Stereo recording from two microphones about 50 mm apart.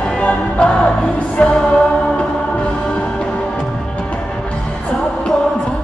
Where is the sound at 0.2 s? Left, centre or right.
Left.